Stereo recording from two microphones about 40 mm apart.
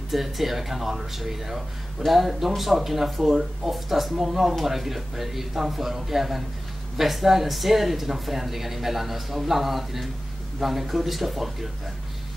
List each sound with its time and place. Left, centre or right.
0.1 s speech: centre